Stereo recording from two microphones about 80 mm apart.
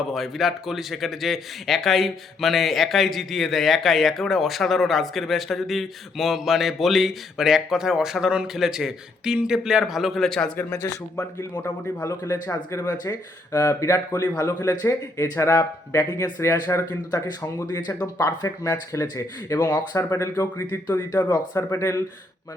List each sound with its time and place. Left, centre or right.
0.1 s speech: centre
10.7 s speech: left
12.0 s speech: left
19.5 s speech: left
20.0 s speech: left
21.2 s speech: left
21.7 s speech: left